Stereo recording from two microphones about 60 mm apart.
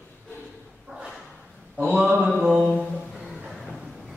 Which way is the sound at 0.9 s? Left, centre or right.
Centre.